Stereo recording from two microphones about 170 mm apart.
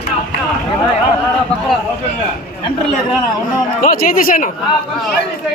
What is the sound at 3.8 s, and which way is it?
Speech, 55° left (ahead or behind).